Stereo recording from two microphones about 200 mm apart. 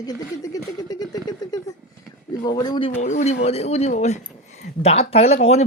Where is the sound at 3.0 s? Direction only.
35° left (ahead or behind).